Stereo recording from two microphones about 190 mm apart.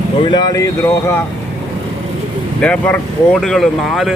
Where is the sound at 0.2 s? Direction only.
25° left (ahead or behind).